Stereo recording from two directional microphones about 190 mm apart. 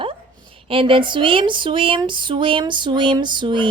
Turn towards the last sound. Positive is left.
turn(degrees=-25)  # may be behind; listen again after turning